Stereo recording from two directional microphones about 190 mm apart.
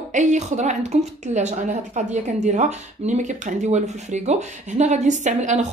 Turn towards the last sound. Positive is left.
turn(degrees=-40)  # may be behind; listen again after turning